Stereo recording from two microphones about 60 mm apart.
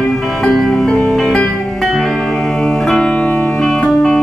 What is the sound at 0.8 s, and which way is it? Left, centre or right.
Music, centre.